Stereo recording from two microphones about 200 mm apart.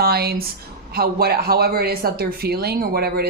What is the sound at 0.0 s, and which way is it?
A woman's voice, 50° right (ahead or behind).